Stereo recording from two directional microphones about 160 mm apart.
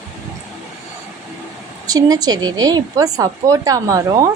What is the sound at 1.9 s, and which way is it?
A woman's voice, 25° right (ahead or behind).